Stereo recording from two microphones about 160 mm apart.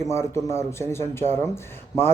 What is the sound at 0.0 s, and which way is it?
A man's voice, 15° left (ahead or behind).